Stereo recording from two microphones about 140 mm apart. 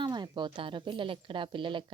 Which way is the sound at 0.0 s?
30° right (ahead or behind).